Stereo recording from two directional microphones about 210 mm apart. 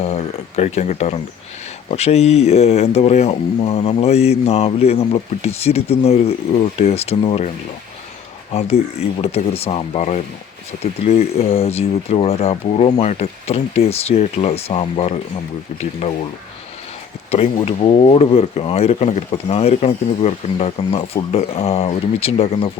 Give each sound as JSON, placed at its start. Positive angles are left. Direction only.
{"t": 0.0, "sound": "speech", "side_deg": 30}
{"t": 8.5, "sound": "speech", "side_deg": 30}
{"t": 17.3, "sound": "speech", "side_deg": 30}